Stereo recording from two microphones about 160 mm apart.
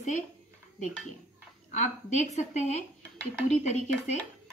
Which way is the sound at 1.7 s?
45° left (ahead or behind).